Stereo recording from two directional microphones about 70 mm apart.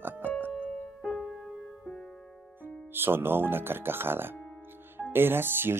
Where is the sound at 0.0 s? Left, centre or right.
Right.